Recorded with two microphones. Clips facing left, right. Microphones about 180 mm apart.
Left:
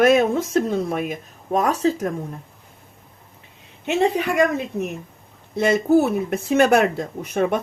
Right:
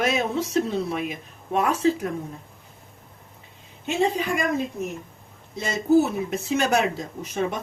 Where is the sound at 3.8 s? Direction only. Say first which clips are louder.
Left 4 dB; 65° left (ahead or behind).